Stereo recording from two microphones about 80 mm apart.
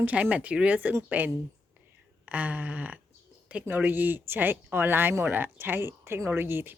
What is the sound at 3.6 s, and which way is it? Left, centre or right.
Speech, right.